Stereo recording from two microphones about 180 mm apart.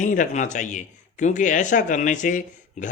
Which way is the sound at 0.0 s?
45° left (ahead or behind).